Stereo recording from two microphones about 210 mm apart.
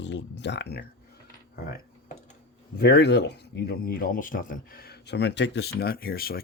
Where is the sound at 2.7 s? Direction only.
50° left (ahead or behind).